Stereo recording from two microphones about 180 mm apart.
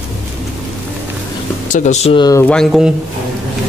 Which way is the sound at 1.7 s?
40° left (ahead or behind).